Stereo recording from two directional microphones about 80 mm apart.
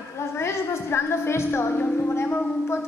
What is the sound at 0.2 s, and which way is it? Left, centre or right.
A woman's voice, left.